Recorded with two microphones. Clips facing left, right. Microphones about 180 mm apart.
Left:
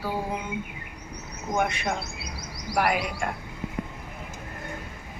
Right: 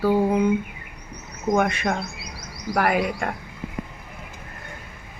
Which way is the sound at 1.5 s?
60° right (ahead or behind).